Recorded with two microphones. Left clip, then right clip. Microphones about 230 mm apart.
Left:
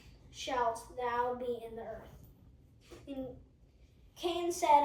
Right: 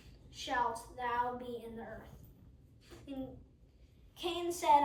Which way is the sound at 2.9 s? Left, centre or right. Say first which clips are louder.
Left 2 dB; right.